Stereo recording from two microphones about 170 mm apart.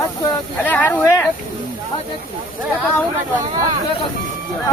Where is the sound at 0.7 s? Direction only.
10° left (ahead or behind).